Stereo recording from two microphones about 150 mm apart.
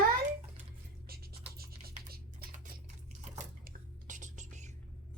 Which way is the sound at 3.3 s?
65° right (ahead or behind).